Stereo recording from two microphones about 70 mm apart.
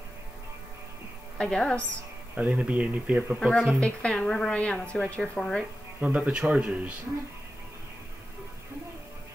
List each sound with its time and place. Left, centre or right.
1.4 s a woman's voice: centre
2.3 s speech: right
3.4 s speech: centre
3.8 s a woman's voice: centre
5.9 s speech: right